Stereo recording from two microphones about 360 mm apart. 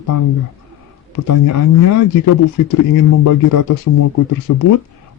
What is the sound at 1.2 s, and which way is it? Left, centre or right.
Speech, left.